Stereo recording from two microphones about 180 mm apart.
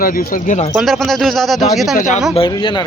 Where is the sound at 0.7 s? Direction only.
Centre (ahead or behind).